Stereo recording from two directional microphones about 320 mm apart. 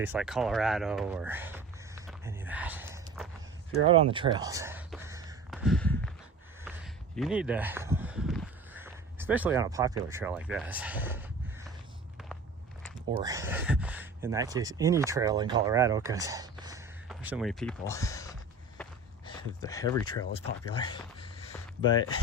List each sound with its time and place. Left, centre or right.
0.0 s speech: centre
2.0 s walk: centre
4.1 s a sound: centre
7.2 s speech: centre
13.1 s speech: centre
18.8 s walk: centre
19.2 s speech: centre